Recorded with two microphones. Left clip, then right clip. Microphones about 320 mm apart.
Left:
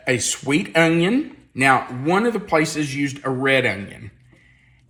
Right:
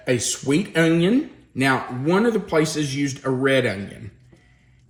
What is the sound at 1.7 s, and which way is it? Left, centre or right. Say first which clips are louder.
Speech: left 3 dB; centre.